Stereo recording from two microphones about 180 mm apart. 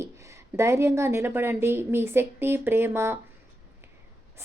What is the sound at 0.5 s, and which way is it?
Speech, 15° right (ahead or behind).